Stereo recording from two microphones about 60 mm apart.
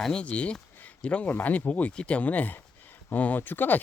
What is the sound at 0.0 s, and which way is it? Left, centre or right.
Speech, centre.